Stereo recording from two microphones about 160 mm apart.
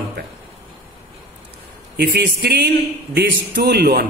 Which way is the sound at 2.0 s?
85° right.